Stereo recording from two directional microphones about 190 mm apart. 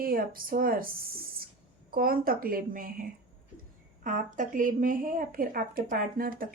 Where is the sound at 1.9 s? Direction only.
50° right (ahead or behind).